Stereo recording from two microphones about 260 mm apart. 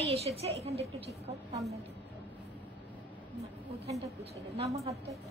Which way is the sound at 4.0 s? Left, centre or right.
Right.